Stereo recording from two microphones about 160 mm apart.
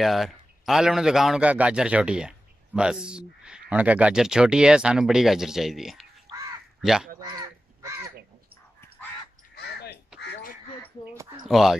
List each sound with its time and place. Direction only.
0.0 s a man's voice: centre (ahead or behind)
7.2 s crow: 25° right (ahead or behind)
9.6 s quack: 90° left
11.1 s a sound: 20° right (ahead or behind)
11.4 s a man's voice: centre (ahead or behind)